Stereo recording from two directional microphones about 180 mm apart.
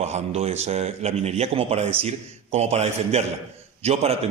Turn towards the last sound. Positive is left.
turn(degrees=-35)  # may be behind; listen again after turning